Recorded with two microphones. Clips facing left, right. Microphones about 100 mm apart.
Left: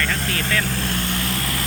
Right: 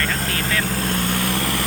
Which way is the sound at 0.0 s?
40° right (ahead or behind).